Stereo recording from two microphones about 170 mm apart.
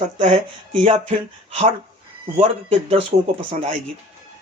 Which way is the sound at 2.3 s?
35° right (ahead or behind).